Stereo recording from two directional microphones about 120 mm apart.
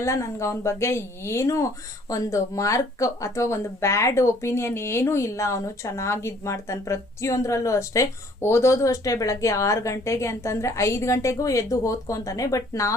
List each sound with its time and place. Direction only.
0.0 s speech: 25° left (ahead or behind)